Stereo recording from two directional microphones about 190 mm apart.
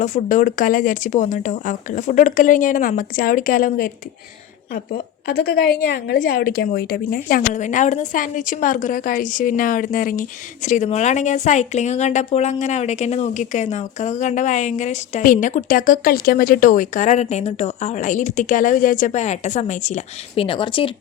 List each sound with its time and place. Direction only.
0.0 s speech: 40° left (ahead or behind)
5.3 s a woman's voice: 55° left (ahead or behind); by 20.9 s 25° left (ahead or behind)